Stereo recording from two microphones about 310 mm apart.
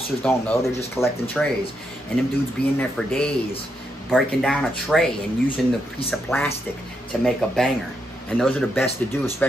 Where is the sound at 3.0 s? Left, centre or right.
Centre.